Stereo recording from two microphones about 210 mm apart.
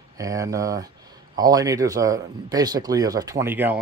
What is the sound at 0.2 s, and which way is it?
Speech, 15° right (ahead or behind).